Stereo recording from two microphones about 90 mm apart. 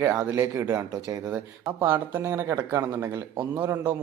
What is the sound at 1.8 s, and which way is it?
A man's voice, 20° right (ahead or behind).